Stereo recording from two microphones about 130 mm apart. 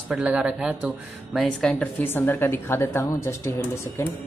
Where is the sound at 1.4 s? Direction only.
5° left (ahead or behind); by 4.1 s 20° left (ahead or behind).